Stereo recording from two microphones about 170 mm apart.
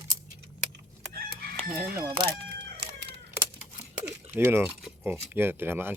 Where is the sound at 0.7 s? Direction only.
70° right (ahead or behind).